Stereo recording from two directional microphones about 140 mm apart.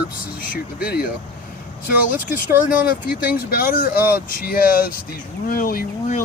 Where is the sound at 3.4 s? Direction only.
90° left.